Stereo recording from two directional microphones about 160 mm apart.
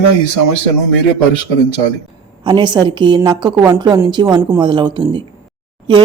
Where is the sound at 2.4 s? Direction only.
30° right (ahead or behind).